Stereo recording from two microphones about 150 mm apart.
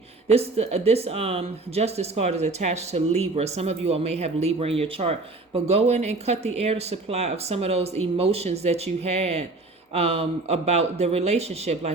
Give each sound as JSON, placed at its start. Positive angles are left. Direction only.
{"t": 0.3, "sound": "speech", "side_deg": -45}